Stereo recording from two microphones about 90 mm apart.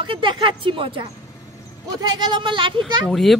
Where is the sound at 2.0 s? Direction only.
55° right (ahead or behind).